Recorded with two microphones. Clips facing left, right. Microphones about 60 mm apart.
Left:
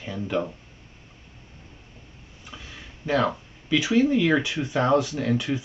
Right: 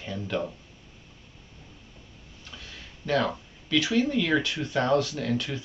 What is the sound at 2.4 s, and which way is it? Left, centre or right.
Speech, centre.